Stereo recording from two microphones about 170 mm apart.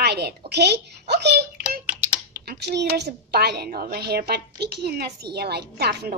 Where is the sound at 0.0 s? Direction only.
75° right (ahead or behind).